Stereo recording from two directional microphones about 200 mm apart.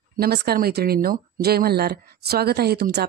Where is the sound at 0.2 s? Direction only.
50° right (ahead or behind).